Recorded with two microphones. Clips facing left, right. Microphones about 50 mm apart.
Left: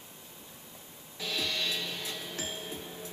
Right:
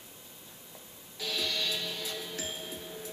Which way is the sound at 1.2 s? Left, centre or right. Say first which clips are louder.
Even; left.